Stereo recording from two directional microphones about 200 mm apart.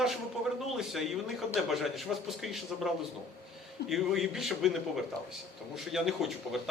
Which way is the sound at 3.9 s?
Centre (ahead or behind).